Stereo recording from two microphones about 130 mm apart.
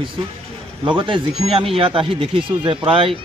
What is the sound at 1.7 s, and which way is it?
Speech, 45° right (ahead or behind).